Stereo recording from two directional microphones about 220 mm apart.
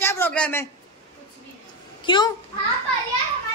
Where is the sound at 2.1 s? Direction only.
20° left (ahead or behind).